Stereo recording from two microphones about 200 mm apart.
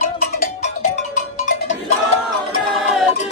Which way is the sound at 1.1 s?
40° left (ahead or behind).